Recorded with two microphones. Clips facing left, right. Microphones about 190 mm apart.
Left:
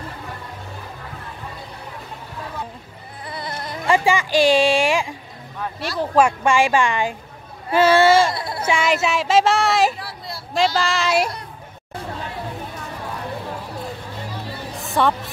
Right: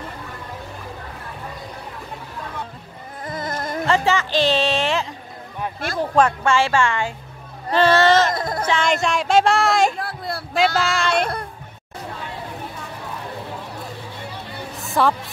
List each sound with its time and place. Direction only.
3.3 s a sound: 45° right (ahead or behind)
3.8 s speech: 10° left (ahead or behind)
5.8 s speech: 50° right (ahead or behind)
6.1 s a woman's voice: 10° left (ahead or behind)
8.4 s a sound: 45° right (ahead or behind)
8.6 s speech: 5° left (ahead or behind)
9.9 s a sound: 50° right (ahead or behind)
10.5 s speech: centre (ahead or behind)
14.8 s music: centre (ahead or behind)